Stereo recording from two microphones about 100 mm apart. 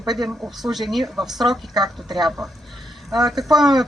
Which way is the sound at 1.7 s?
45° right (ahead or behind).